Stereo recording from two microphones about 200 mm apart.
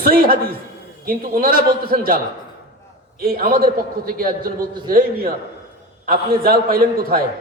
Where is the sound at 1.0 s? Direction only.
45° right (ahead or behind).